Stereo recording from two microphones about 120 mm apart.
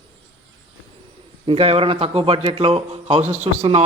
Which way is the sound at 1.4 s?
50° right (ahead or behind).